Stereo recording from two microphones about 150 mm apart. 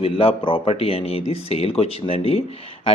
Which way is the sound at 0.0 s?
40° left (ahead or behind).